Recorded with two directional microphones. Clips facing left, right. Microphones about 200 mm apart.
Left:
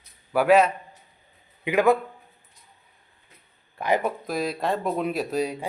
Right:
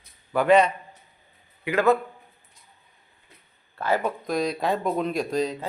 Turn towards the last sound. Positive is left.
turn(degrees=10)  # may be behind; listen again after turning